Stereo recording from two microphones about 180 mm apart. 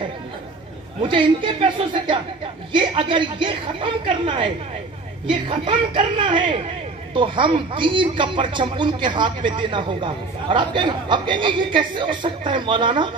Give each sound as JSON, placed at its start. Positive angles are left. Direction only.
{"t": 1.0, "sound": "speech", "side_deg": -25}